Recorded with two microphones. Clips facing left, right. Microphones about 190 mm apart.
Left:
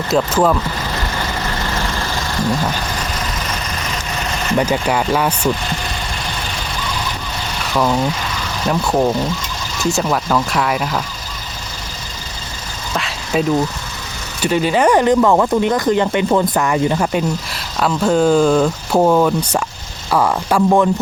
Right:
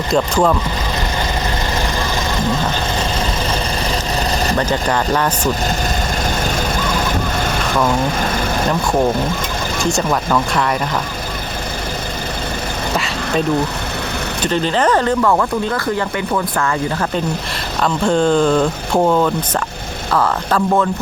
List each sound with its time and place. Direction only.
0.1 s speech: 5° left (ahead or behind)
2.0 s vehicle: 20° right (ahead or behind)
4.5 s speech: 10° left (ahead or behind)
8.2 s vehicle: 50° right (ahead or behind)
9.8 s speech: 5° left (ahead or behind)
14.4 s speech: 10° left (ahead or behind)